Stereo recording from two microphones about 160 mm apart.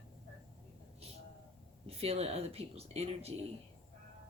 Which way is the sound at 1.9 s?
40° right (ahead or behind).